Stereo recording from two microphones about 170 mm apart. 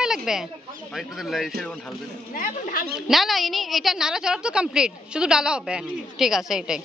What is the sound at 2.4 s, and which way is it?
Speech, 55° left (ahead or behind).